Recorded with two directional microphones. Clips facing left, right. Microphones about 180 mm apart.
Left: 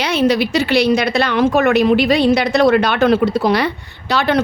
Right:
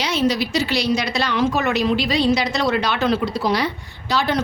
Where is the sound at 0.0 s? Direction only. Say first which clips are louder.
Left 5 dB; 60° left (ahead or behind).